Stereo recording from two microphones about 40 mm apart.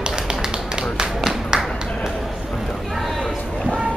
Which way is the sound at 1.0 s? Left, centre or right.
Centre.